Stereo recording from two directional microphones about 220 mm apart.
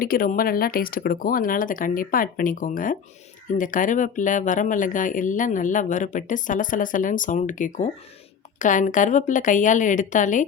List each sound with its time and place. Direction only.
0.0 s speech: 40° left (ahead or behind)